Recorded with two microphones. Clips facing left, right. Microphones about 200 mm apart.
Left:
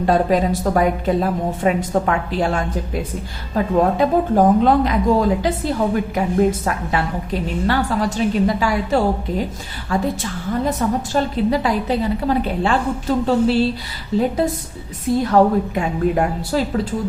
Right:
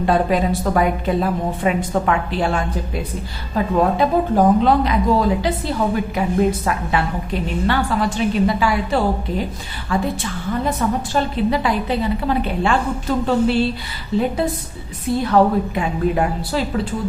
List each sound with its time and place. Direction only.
0.0 s a woman's voice: 40° left (ahead or behind)